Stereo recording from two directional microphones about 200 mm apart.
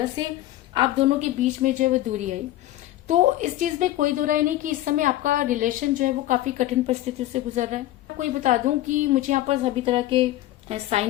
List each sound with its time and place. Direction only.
0.7 s a woman's voice: 30° right (ahead or behind)